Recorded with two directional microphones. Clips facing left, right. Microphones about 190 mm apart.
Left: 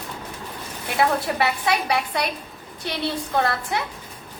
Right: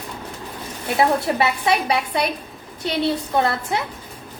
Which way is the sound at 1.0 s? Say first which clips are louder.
Right 3 dB; 25° right (ahead or behind).